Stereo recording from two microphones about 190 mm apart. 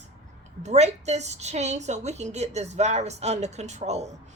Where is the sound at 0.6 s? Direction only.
35° right (ahead or behind).